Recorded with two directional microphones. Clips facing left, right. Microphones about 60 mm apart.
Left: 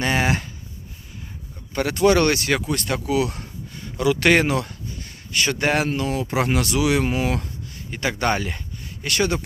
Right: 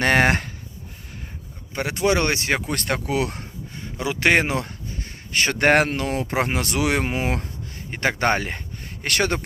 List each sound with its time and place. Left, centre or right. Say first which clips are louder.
0.0 s speech: right 3 dB; right
1.7 s speech: left 4 dB; centre
2.6 s speech: left 1 dB; right
6.7 s speech: left 1 dB; right
9.0 s speech: even; right